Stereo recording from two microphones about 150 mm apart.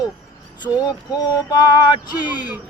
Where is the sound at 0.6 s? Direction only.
30° left (ahead or behind).